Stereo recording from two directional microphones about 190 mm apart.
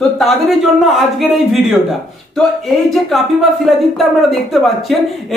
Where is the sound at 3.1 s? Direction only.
Centre (ahead or behind).